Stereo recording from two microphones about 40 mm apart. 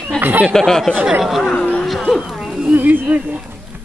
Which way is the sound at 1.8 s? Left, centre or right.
Centre.